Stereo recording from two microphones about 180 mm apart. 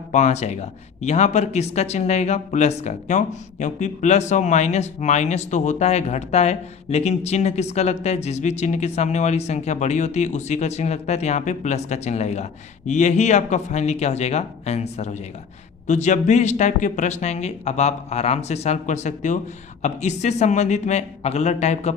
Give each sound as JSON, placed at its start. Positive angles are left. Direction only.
{"t": 0.1, "sound": "speech", "side_deg": 40}